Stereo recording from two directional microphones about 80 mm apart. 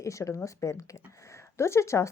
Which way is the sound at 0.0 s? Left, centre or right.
Left.